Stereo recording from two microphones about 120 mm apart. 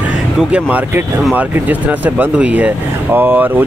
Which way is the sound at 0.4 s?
10° right (ahead or behind).